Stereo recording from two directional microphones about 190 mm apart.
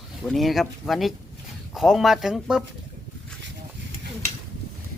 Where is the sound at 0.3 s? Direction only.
Centre (ahead or behind).